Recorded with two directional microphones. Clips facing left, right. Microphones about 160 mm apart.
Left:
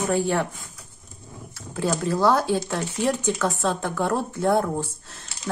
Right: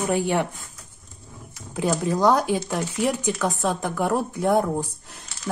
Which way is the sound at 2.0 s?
15° right (ahead or behind).